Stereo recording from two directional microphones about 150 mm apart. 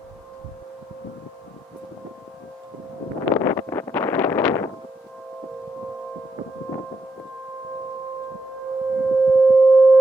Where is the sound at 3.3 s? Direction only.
15° left (ahead or behind).